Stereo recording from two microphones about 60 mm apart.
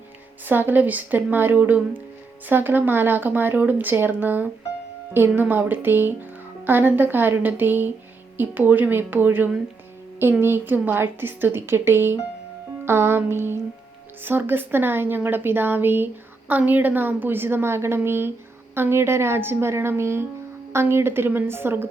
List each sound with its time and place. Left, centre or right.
0.4 s a woman's voice: right